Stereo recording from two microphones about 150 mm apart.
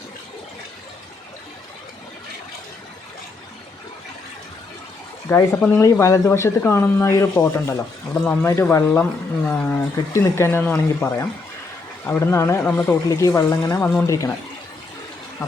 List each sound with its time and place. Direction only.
5.3 s speech: 15° left (ahead or behind)